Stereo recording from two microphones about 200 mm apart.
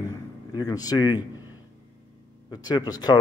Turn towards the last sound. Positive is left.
turn(degrees=20)  # may be behind; listen again after turning